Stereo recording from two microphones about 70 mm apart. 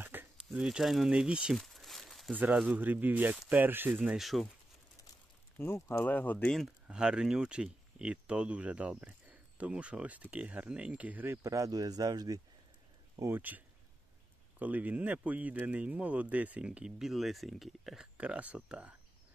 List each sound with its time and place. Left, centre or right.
0.0 s a sound: right
0.5 s speech: centre
1.6 s a sound: centre
2.3 s speech: right
4.2 s speech: centre
5.6 s speech: left
6.0 s speech: left
6.9 s speech: centre
11.2 s speech: right
13.3 s speech: right
14.6 s speech: right
17.0 s speech: centre
18.1 s speech: centre